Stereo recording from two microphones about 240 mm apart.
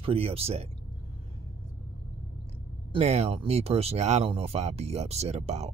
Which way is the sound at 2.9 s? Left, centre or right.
Right.